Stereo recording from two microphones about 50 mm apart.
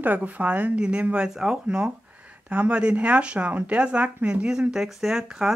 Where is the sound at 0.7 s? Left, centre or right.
Right.